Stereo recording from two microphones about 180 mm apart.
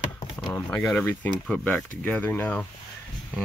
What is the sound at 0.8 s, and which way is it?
Speech, 10° left (ahead or behind).